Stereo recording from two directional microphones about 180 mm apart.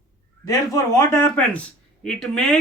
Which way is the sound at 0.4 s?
15° left (ahead or behind).